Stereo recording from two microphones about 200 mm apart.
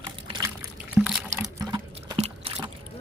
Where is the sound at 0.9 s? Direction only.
5° right (ahead or behind).